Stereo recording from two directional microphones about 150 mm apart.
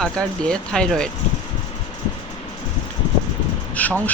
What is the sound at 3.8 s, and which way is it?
Speech, 10° left (ahead or behind).